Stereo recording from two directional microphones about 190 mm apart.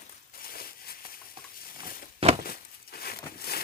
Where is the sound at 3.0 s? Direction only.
55° left (ahead or behind).